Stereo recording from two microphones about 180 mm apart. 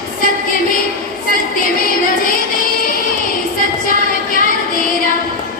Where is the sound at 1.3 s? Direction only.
50° left (ahead or behind).